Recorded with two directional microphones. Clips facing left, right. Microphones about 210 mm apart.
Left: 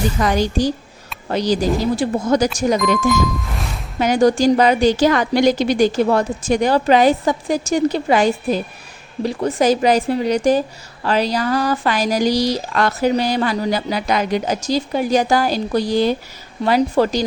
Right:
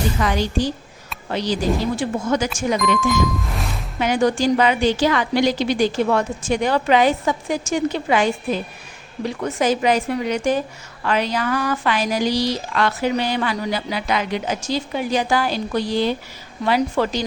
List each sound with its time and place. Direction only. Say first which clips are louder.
0.2 s speech: left 5 dB; 40° left (ahead or behind)
3.5 s music: even; centre (ahead or behind)
4.0 s speech: left 4 dB; 40° left (ahead or behind)